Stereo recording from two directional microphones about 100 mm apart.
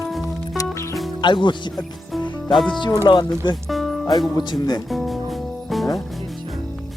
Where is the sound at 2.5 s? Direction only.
Centre (ahead or behind).